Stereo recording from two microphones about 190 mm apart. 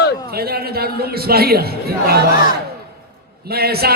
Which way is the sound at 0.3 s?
55° right (ahead or behind).